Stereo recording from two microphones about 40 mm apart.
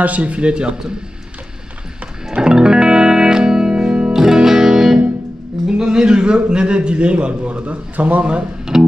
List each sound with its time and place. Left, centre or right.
0.0 s a man's voice: right
2.4 s music: centre
4.1 s music: centre
5.8 s a man's voice: right
8.7 s music: centre